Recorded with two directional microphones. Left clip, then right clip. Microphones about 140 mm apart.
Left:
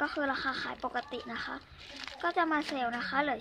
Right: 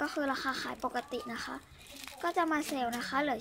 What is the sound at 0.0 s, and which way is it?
Speech, 20° right (ahead or behind).